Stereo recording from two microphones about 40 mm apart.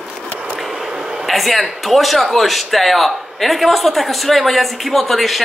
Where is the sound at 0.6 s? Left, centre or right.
Centre.